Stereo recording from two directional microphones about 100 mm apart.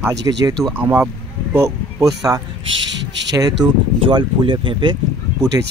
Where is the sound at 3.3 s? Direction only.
40° right (ahead or behind).